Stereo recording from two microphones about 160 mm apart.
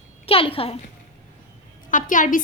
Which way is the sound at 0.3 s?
35° left (ahead or behind).